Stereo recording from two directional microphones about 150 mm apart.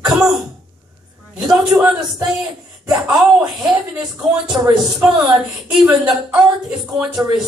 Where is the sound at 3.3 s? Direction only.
10° right (ahead or behind).